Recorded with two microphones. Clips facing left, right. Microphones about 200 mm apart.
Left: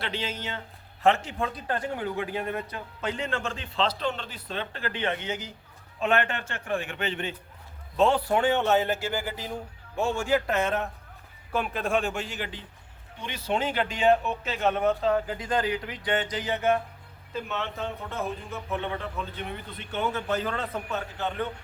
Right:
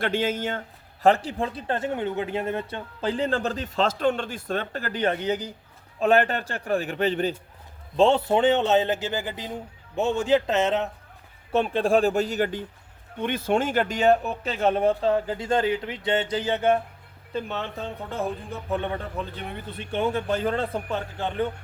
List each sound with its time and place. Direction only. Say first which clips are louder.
0.0 s speech: right 8 dB; 50° right (ahead or behind)
1.0 s speech: right 3 dB; 35° right (ahead or behind)
7.9 s a man's voice: right 3 dB; 25° right (ahead or behind)